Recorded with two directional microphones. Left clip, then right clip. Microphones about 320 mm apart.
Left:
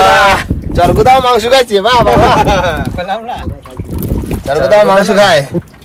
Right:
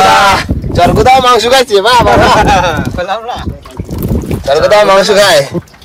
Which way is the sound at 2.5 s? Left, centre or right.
Centre.